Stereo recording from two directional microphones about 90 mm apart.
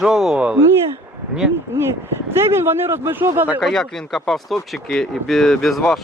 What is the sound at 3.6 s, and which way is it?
Speech, 5° left (ahead or behind).